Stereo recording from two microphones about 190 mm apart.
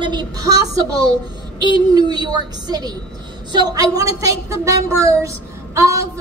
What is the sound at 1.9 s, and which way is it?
A woman's voice, 20° right (ahead or behind).